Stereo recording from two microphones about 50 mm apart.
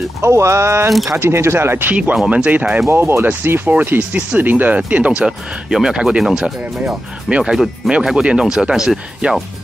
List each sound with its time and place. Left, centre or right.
0.2 s speech: right
1.1 s speech: right
1.9 s speech: right
2.9 s speech: right
4.7 s speech: right
5.7 s speech: centre
7.5 s speech: centre